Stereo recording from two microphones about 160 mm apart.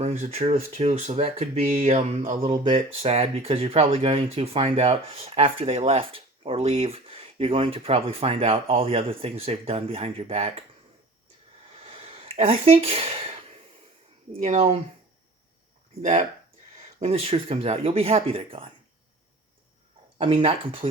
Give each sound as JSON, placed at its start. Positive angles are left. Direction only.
{"t": 0.0, "sound": "speech", "side_deg": -45}
{"t": 11.8, "sound": "a sound", "side_deg": -35}
{"t": 14.3, "sound": "speech", "side_deg": -45}
{"t": 16.0, "sound": "speech", "side_deg": -45}
{"t": 20.1, "sound": "speech", "side_deg": -35}